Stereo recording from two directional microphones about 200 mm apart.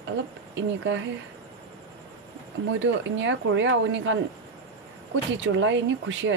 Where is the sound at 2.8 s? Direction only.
65° right (ahead or behind).